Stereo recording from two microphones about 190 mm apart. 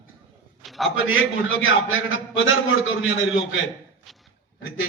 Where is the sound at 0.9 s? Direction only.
90° left.